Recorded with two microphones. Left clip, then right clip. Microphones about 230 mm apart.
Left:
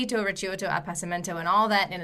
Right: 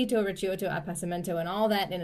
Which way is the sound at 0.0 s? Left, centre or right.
Centre.